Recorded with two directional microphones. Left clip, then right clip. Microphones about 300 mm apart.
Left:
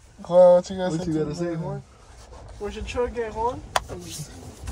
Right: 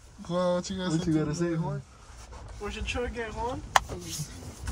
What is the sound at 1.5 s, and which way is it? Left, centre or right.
Speech, centre.